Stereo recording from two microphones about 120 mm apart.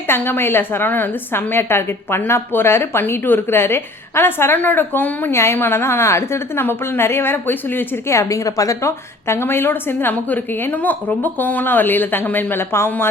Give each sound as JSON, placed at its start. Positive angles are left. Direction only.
{"t": 0.1, "sound": "a woman's voice", "side_deg": 20}